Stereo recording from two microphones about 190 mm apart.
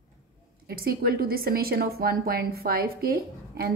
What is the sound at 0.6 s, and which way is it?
A woman's voice, 50° right (ahead or behind).